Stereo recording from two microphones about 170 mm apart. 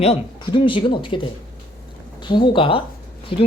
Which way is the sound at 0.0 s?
30° left (ahead or behind).